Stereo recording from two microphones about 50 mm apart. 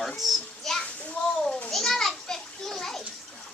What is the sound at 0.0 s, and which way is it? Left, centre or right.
Children playing, centre.